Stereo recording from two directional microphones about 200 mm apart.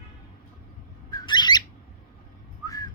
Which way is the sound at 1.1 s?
20° left (ahead or behind).